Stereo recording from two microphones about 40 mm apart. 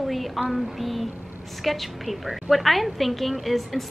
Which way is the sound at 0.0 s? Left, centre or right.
Centre.